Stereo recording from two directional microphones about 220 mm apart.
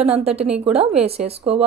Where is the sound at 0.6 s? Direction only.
30° right (ahead or behind).